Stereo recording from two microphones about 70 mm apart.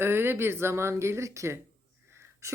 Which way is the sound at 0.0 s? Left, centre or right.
Right.